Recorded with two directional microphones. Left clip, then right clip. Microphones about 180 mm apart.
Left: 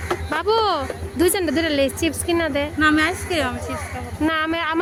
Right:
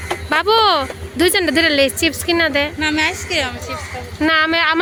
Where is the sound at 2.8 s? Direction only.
55° left (ahead or behind).